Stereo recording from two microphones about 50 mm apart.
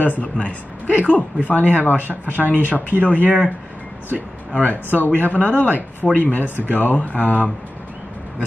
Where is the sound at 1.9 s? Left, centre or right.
Right.